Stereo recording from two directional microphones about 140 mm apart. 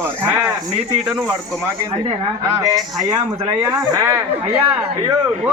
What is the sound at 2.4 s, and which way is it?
Speech, 25° right (ahead or behind).